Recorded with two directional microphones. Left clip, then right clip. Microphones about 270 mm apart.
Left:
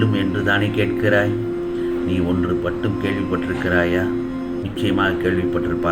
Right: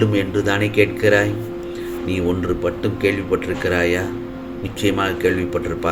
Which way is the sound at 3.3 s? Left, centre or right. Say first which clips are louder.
Right 1 dB; right.